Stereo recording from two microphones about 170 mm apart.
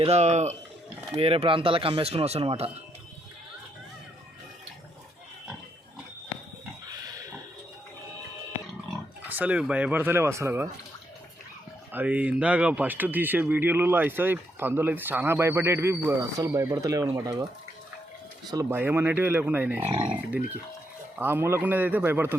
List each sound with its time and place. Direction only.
0.0 s speech: 40° right (ahead or behind)
9.3 s speech: 10° right (ahead or behind)
11.9 s speech: 10° right (ahead or behind)
18.5 s speech: 10° right (ahead or behind)
19.9 s speech: 30° right (ahead or behind)
21.2 s speech: 10° right (ahead or behind)